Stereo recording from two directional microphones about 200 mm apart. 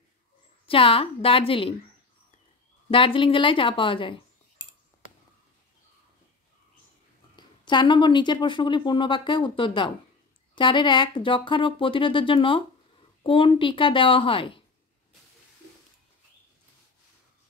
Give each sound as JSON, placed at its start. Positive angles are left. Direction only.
{"t": 0.7, "sound": "a woman's voice", "side_deg": 25}
{"t": 2.9, "sound": "speech", "side_deg": 25}
{"t": 7.3, "sound": "a woman's voice", "side_deg": 20}